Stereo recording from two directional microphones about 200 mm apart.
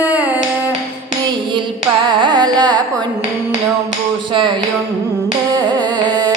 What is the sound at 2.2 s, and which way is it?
Carnatic music, 20° right (ahead or behind).